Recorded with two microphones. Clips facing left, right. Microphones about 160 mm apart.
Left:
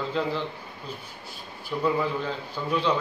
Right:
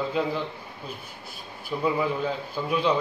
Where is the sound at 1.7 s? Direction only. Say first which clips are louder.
Even; 10° right (ahead or behind).